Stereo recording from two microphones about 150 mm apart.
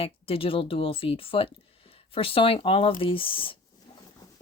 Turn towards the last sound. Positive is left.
turn(degrees=35)  # may be behind; listen again after turning